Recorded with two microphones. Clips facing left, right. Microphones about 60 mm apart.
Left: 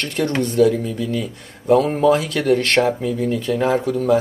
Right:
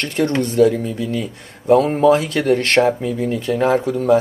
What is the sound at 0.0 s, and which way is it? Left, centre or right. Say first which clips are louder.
Speech: right 2 dB; centre.